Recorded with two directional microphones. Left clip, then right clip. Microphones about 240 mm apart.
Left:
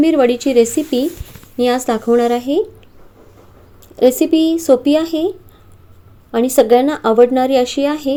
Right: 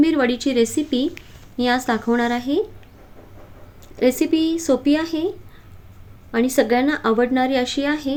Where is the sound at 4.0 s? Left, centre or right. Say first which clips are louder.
Left 6 dB; centre.